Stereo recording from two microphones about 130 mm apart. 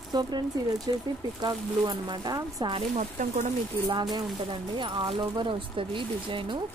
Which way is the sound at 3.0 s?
65° right (ahead or behind).